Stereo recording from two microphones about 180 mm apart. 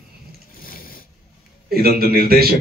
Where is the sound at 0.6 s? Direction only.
55° left (ahead or behind).